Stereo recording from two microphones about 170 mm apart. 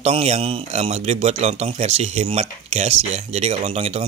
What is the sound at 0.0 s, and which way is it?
A man's voice, 40° right (ahead or behind).